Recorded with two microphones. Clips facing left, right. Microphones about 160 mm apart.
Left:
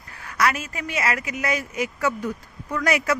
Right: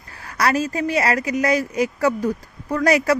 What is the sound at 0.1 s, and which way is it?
Speech, 35° right (ahead or behind).